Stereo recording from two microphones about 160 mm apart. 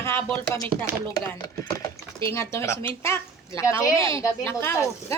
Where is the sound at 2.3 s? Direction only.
15° left (ahead or behind).